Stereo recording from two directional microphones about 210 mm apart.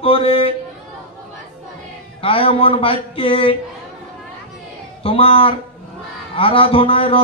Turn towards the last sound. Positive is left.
turn(degrees=25)  # may be behind; listen again after turning